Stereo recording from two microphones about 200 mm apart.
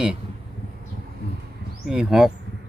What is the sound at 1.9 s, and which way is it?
Speech, 5° right (ahead or behind).